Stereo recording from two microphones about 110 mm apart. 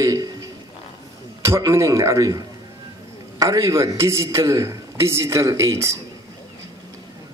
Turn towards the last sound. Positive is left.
turn(degrees=-25)  # may be behind; listen again after turning